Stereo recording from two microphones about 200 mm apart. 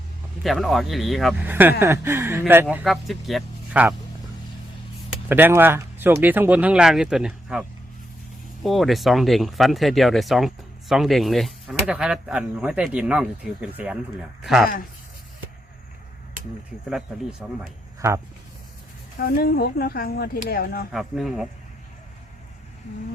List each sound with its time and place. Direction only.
0.4 s speech: centre (ahead or behind)
5.1 s speech: 10° right (ahead or behind)
8.6 s speech: centre (ahead or behind)
17.4 s speech: 5° right (ahead or behind)
19.2 s speech: 45° left (ahead or behind)
20.9 s speech: centre (ahead or behind)